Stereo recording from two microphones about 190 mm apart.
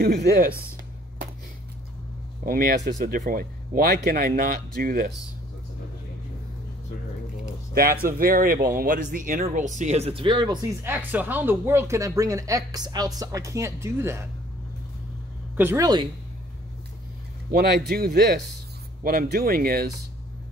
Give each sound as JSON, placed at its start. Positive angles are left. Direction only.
{"t": 0.0, "sound": "speech", "side_deg": -50}
{"t": 2.4, "sound": "speech", "side_deg": -50}
{"t": 7.7, "sound": "speech", "side_deg": -50}
{"t": 10.8, "sound": "speech", "side_deg": -10}
{"t": 15.5, "sound": "speech", "side_deg": -15}
{"t": 17.5, "sound": "speech", "side_deg": -55}